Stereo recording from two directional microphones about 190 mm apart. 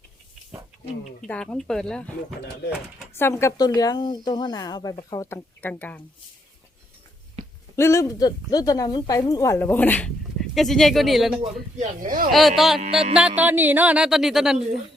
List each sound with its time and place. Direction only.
1.2 s speech: 5° left (ahead or behind)
3.2 s a woman's voice: 10° left (ahead or behind)
7.8 s speech: 15° left (ahead or behind); by 11.3 s centre (ahead or behind)
11.8 s speech: 45° right (ahead or behind)
12.3 s speech: centre (ahead or behind)